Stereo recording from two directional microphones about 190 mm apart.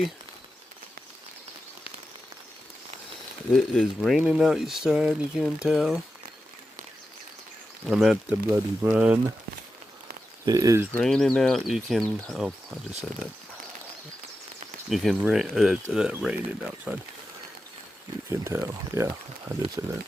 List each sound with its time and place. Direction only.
3.5 s speech: centre (ahead or behind)
7.9 s speech: 5° right (ahead or behind)
10.4 s speech: 20° right (ahead or behind)
10.9 s speech: centre (ahead or behind)
14.8 s speech: centre (ahead or behind)
18.3 s speech: 15° right (ahead or behind)